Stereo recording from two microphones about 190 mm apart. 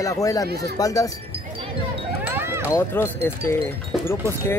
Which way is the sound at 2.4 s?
10° right (ahead or behind).